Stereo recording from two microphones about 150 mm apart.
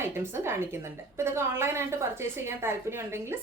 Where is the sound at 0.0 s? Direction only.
15° right (ahead or behind).